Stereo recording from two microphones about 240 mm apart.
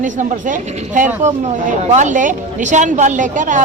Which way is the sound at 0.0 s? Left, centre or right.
Right.